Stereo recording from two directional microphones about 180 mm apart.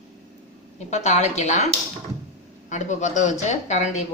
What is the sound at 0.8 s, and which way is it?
Speech, 40° left (ahead or behind).